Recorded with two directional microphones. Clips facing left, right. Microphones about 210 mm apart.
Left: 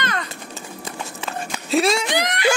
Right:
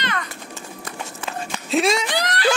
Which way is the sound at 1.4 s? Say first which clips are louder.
Left 1 dB; centre (ahead or behind).